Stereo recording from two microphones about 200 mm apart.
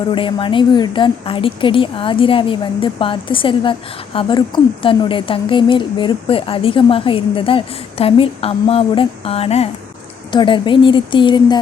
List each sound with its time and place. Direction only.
0.1 s speech: 25° left (ahead or behind)